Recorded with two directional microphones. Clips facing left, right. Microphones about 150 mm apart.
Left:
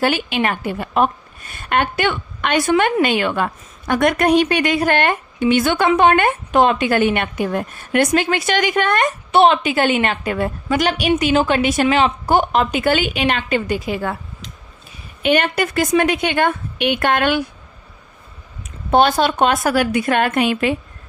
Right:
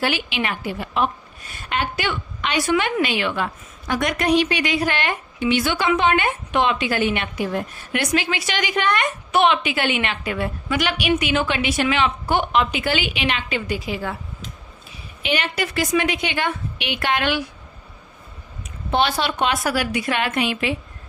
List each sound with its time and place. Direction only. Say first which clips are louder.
0.0 s a woman's voice: left 5 dB; 45° left (ahead or behind)
15.2 s a woman's voice: left 7 dB; 50° left (ahead or behind)
18.9 s a woman's voice: left 6 dB; 45° left (ahead or behind)